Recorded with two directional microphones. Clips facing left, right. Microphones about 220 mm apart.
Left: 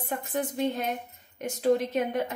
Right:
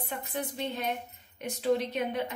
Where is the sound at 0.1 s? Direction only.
45° left (ahead or behind).